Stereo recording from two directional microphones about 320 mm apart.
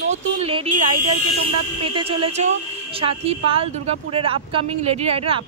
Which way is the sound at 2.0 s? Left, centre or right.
Centre.